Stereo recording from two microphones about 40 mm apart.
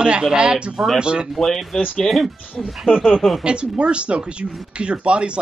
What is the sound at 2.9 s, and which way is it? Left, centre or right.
Speech, left.